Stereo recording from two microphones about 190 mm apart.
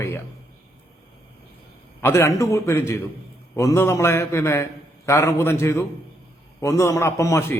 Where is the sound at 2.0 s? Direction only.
15° left (ahead or behind).